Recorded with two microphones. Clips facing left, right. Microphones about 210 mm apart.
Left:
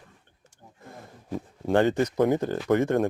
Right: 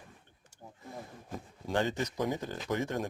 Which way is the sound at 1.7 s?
60° left (ahead or behind).